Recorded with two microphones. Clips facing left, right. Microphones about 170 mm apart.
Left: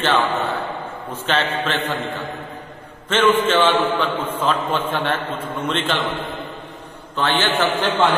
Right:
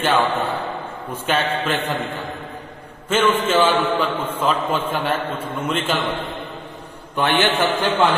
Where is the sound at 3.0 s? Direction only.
10° right (ahead or behind).